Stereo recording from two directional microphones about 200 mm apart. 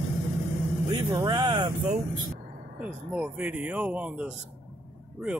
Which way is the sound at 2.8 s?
5° right (ahead or behind).